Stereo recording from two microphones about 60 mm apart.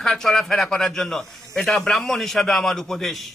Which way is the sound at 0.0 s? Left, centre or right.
Centre.